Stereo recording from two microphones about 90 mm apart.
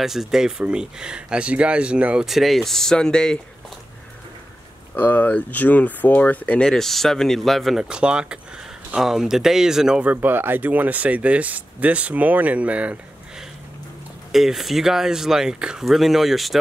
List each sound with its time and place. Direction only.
0.0 s speech: 5° right (ahead or behind)
2.2 s speech: centre (ahead or behind)
4.9 s speech: 20° left (ahead or behind); by 7.8 s centre (ahead or behind)
7.9 s speech: 10° right (ahead or behind)
10.2 s speech: 20° right (ahead or behind)
14.3 s speech: 5° right (ahead or behind)